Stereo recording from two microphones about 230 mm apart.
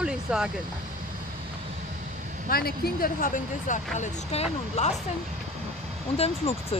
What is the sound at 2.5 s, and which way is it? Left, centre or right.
Speech, left.